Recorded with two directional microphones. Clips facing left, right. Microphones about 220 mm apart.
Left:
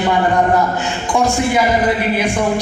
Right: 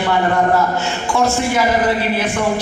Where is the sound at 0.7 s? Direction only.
15° left (ahead or behind).